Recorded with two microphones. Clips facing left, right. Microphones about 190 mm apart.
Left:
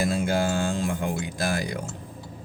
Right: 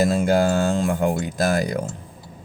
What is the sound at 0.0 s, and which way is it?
Speech, 45° right (ahead or behind).